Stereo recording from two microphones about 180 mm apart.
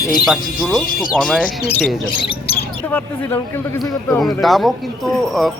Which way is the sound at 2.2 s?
30° left (ahead or behind).